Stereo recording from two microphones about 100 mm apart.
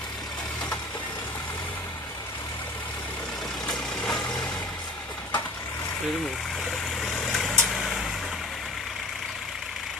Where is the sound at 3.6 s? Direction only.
5° left (ahead or behind).